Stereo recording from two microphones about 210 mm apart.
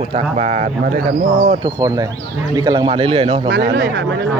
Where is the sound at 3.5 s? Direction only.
45° right (ahead or behind).